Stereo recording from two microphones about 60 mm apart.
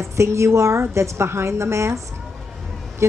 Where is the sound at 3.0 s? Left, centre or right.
Right.